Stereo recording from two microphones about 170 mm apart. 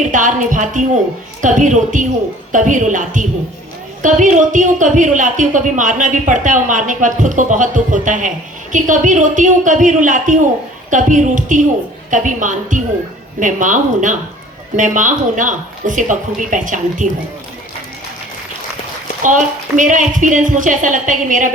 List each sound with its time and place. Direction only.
0.1 s a woman's voice: 50° right (ahead or behind)
19.2 s a woman's voice: 50° right (ahead or behind)